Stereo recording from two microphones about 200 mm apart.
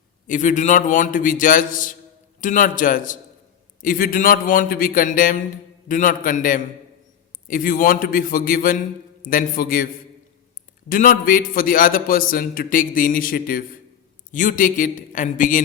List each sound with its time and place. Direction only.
0.3 s a man's voice: 40° left (ahead or behind)